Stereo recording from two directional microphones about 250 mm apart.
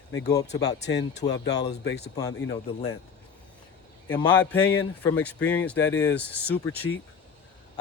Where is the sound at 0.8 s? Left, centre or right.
Left.